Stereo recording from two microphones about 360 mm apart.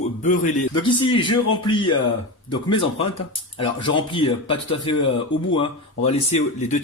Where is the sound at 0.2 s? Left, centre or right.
Left.